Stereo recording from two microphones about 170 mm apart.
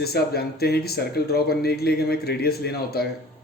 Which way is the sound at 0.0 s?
70° left (ahead or behind).